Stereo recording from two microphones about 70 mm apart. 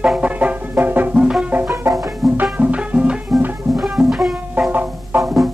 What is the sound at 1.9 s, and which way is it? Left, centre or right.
Music, right.